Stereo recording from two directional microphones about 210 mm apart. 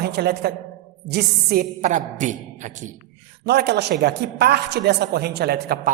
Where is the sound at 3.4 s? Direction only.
50° right (ahead or behind).